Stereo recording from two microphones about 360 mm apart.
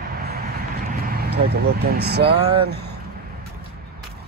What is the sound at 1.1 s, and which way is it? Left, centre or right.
Speech, right.